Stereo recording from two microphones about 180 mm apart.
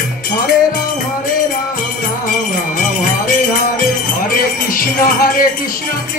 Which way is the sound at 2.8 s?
45° left (ahead or behind).